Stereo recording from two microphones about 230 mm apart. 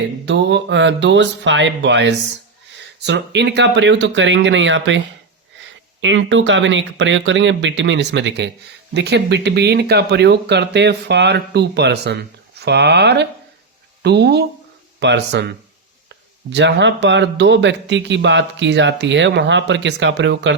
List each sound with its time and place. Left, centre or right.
0.3 s speech: right
16.5 s speech: right